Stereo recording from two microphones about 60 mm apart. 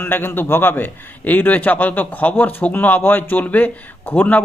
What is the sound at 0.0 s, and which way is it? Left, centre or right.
A man's voice, left.